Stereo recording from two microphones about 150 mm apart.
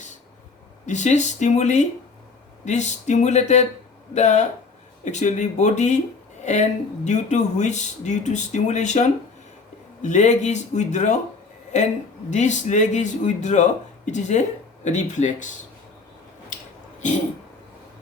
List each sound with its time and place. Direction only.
0.9 s speech: 50° left (ahead or behind)